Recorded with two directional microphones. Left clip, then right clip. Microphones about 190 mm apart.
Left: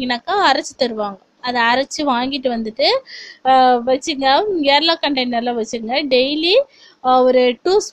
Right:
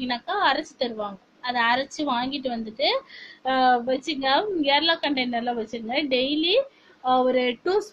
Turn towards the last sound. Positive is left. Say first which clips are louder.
# left 9 dB
turn(degrees=45)  # may be behind; listen again after turning